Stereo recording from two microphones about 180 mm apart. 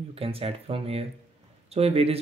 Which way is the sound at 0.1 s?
35° right (ahead or behind).